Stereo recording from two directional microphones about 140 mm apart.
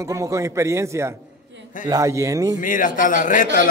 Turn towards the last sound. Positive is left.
turn(degrees=75)  # may be behind; listen again after turning